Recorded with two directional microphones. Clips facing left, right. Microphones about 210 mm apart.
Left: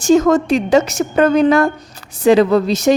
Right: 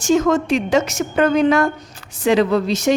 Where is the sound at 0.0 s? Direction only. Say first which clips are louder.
Left 4 dB; 35° left (ahead or behind).